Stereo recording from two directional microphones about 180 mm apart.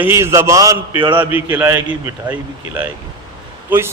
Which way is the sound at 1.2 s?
10° right (ahead or behind).